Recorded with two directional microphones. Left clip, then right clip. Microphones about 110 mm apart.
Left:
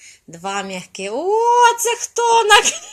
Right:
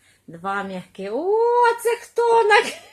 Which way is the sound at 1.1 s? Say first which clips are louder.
Left 3 dB; 10° left (ahead or behind).